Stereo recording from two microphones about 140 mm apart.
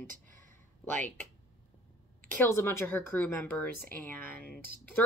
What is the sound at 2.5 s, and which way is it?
Speech, 20° left (ahead or behind).